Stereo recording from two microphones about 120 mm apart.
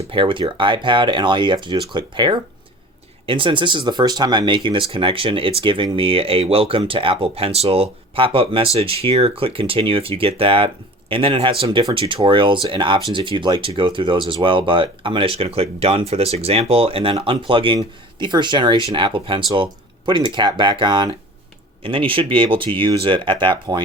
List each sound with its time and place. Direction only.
0.1 s speech: 45° right (ahead or behind)